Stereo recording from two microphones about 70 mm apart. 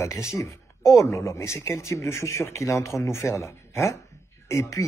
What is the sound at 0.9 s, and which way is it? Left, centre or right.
A man's voice, left.